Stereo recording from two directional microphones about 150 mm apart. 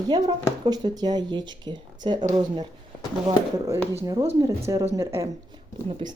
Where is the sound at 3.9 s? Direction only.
20° right (ahead or behind).